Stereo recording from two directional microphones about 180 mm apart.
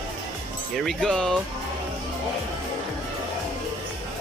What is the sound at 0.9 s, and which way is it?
Speech, 5° left (ahead or behind).